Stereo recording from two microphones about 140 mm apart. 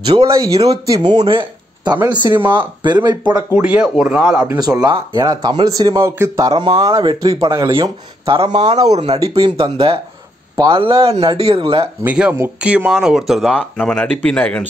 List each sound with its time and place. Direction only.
0.3 s speech: 25° right (ahead or behind)
1.2 s a sound: 35° right (ahead or behind)
2.3 s speech: 15° right (ahead or behind)
3.1 s speech: 30° right (ahead or behind)
3.5 s speech: 10° right (ahead or behind)
4.6 s speech: 30° right (ahead or behind)
8.3 s speech: 35° right (ahead or behind)
8.9 s speech: 45° right (ahead or behind)
12.0 s speech: 10° right (ahead or behind); by 14.6 s 10° left (ahead or behind)